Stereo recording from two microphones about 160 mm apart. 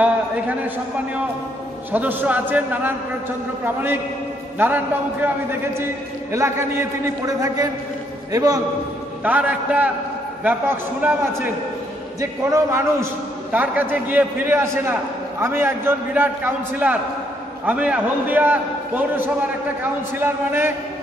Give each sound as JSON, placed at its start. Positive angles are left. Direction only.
{"t": 1.9, "sound": "a man's voice", "side_deg": -10}
{"t": 9.2, "sound": "a man's voice", "side_deg": -10}